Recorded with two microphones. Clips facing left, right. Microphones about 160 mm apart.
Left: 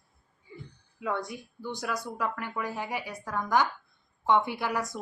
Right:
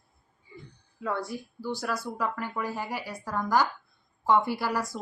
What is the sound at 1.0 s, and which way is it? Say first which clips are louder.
Speech: right 1 dB; centre (ahead or behind).